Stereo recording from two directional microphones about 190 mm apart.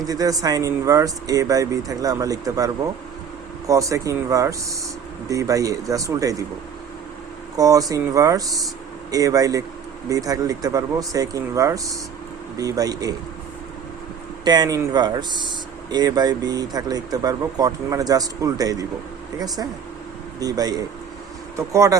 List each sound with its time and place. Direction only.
0.0 s speech: 20° right (ahead or behind)
7.5 s speech: 20° right (ahead or behind)
14.4 s speech: 20° right (ahead or behind)
20.4 s speech: 20° right (ahead or behind)